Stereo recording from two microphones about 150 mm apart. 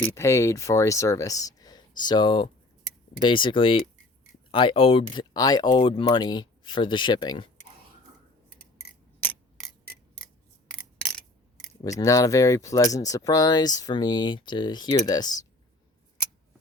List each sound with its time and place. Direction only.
0.0 s speech: 20° left (ahead or behind)
10.7 s a sound: 5° left (ahead or behind)
11.8 s speech: 25° left (ahead or behind)